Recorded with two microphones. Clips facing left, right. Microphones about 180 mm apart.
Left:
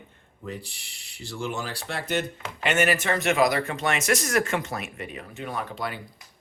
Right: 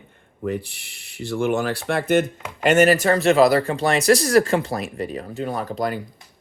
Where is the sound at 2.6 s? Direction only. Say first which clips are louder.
Right 8 dB; 40° right (ahead or behind).